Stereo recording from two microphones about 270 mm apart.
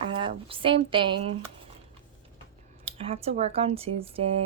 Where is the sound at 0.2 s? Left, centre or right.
Centre.